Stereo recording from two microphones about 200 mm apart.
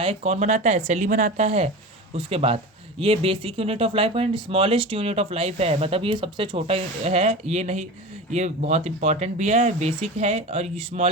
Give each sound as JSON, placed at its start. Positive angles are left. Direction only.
{"t": 0.0, "sound": "speech", "side_deg": -30}